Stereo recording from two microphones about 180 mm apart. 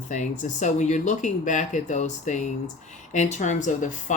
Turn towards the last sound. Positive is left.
turn(degrees=45)  # may be behind; listen again after turning